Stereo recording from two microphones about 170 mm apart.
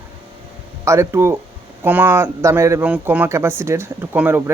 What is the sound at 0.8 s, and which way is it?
Speech, 15° right (ahead or behind).